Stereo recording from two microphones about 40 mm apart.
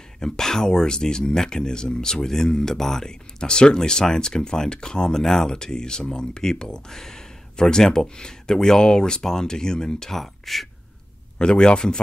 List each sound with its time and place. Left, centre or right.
0.2 s speech: centre
10.1 s speech: centre
11.3 s speech: left